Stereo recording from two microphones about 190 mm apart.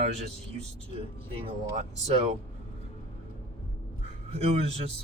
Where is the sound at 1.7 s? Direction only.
35° right (ahead or behind).